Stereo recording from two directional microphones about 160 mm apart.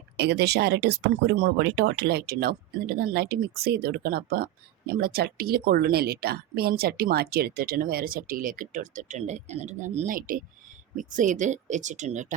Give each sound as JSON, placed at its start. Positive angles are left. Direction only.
{"t": 0.2, "sound": "a woman's voice", "side_deg": -90}